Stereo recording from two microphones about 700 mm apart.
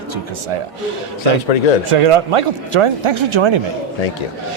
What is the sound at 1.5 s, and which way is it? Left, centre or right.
Speech, left.